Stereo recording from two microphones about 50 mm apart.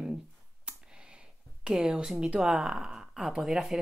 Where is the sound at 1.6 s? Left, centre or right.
Centre.